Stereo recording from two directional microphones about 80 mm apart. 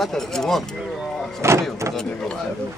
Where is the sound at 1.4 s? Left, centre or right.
Right.